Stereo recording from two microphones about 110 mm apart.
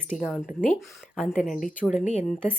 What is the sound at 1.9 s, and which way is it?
Speech, 90° left.